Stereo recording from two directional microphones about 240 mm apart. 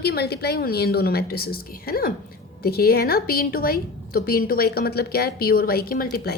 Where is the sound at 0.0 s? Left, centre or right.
Left.